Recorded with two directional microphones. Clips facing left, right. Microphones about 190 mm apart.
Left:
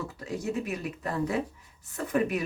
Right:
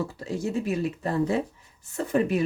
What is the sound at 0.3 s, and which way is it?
Speech, 30° right (ahead or behind).